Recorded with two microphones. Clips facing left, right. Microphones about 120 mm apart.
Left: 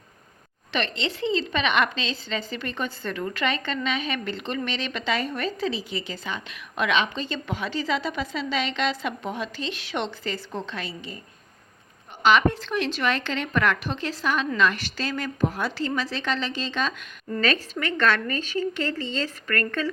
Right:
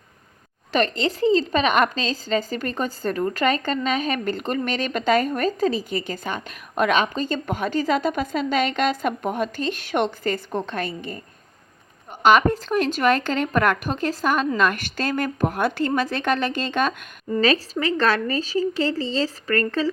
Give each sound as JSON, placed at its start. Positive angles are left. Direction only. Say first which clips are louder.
{"t": 0.7, "sound": "a woman's voice", "louder": "right 6 dB", "side_deg": -45}
{"t": 12.2, "sound": "a woman's voice", "louder": "right 3 dB", "side_deg": -45}
{"t": 17.4, "sound": "a woman's voice", "louder": "right 5 dB", "side_deg": -35}